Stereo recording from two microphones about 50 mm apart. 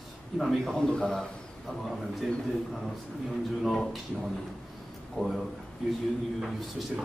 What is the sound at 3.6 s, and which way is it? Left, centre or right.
Speech, centre.